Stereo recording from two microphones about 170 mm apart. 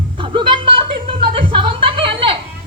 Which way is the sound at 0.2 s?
30° right (ahead or behind).